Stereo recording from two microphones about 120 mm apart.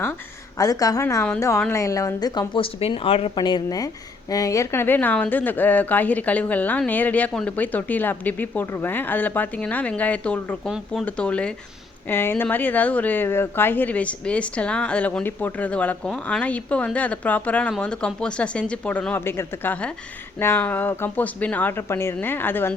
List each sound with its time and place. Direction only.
0.6 s speech: 30° left (ahead or behind)
2.6 s speech: 50° left (ahead or behind)
3.3 s a woman's voice: 40° left (ahead or behind); by 22.7 s 15° left (ahead or behind)